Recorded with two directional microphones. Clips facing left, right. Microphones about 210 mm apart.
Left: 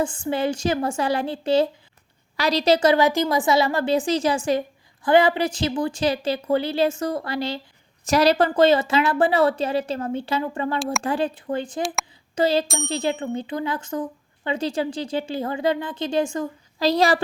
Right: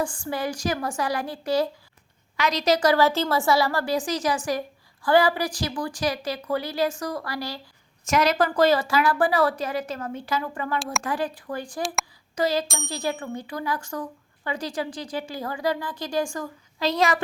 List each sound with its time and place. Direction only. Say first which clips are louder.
0.0 s speech: left 4 dB; 20° left (ahead or behind)
8.0 s speech: left 4 dB; 35° left (ahead or behind)
12.3 s bicycle bell: left 4 dB; 30° left (ahead or behind)
12.9 s speech: left 5 dB; 25° left (ahead or behind)
16.8 s a woman's voice: left 4 dB; 35° left (ahead or behind)